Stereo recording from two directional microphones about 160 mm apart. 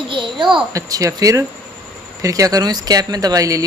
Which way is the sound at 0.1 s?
30° right (ahead or behind).